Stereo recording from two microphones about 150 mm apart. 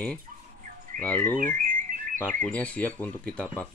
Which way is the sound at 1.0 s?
10° left (ahead or behind).